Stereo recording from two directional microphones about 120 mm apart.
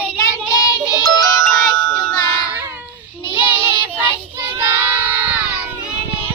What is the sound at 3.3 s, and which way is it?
Child singing, 15° right (ahead or behind).